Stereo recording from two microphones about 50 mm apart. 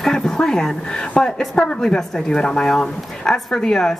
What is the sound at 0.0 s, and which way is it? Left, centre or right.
Speech, centre.